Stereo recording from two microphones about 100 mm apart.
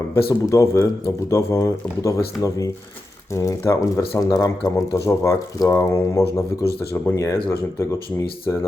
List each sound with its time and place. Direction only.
0.1 s speech: 30° left (ahead or behind)